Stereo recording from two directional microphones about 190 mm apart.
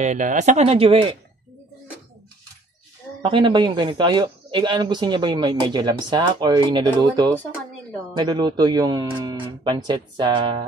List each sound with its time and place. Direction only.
0.0 s speech: 40° right (ahead or behind)
3.2 s speech: 25° right (ahead or behind)